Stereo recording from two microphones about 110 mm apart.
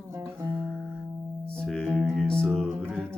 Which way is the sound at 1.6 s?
5° left (ahead or behind).